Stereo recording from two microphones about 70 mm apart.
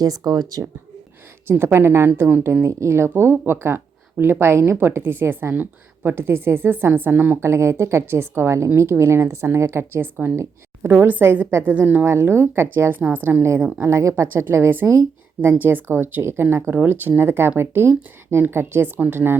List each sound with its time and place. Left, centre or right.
0.3 s speech: right
1.5 s a woman's voice: right
7.4 s a woman's voice: right
10.3 s a woman's voice: right
11.0 s a woman's voice: right
12.0 s a woman's voice: right
12.9 s a woman's voice: right
13.6 s speech: centre
13.8 s a woman's voice: right
14.3 s a woman's voice: right